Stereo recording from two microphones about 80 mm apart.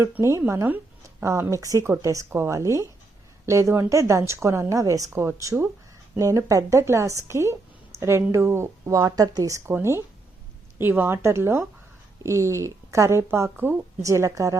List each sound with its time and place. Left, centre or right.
0.0 s a woman's voice: right
9.0 s speech: right
10.8 s a woman's voice: right